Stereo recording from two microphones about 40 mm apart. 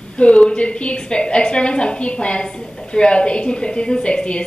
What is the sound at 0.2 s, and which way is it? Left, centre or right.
A woman's voice, left.